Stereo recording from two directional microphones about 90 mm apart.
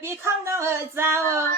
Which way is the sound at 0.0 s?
30° right (ahead or behind).